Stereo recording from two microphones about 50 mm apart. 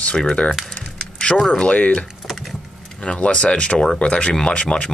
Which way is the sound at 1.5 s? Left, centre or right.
Left.